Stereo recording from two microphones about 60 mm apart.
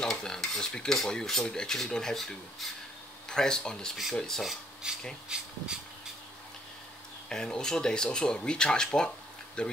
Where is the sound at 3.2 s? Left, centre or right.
Centre.